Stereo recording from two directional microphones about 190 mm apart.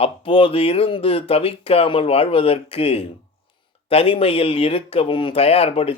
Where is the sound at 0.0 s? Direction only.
30° left (ahead or behind).